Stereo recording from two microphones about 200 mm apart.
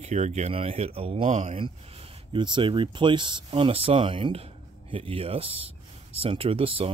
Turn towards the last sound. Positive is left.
turn(degrees=-25)  # may be behind; listen again after turning